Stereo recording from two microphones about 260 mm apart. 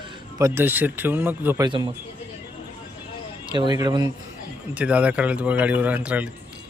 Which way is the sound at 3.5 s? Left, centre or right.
Centre.